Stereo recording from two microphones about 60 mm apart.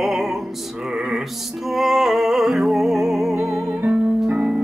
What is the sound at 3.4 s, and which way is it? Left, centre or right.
Music, right.